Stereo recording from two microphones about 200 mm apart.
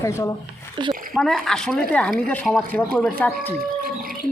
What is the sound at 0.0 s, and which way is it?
Speech, 15° left (ahead or behind).